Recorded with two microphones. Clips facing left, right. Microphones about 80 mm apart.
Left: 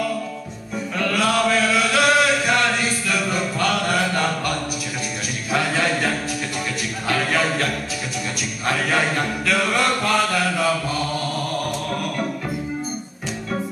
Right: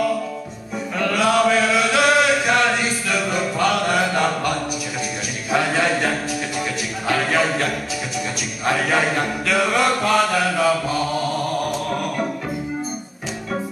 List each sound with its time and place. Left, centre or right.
0.9 s chant: centre
5.5 s music: centre
8.6 s chant: centre